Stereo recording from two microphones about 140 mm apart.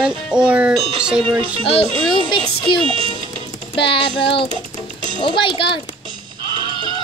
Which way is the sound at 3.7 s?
35° left (ahead or behind).